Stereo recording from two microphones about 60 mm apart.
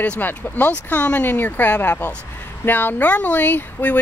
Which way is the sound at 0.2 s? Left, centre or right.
Left.